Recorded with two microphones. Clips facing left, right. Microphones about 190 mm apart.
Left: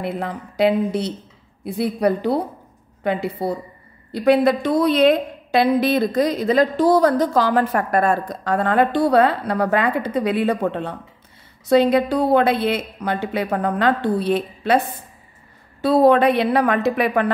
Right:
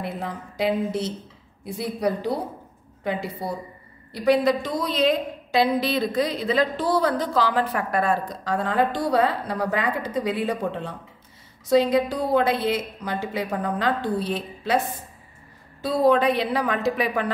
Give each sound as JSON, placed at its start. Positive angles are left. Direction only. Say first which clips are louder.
{"t": 0.0, "sound": "a woman's voice", "louder": "left 5 dB", "side_deg": 65}
{"t": 15.8, "sound": "a woman's voice", "louder": "left 5 dB", "side_deg": 60}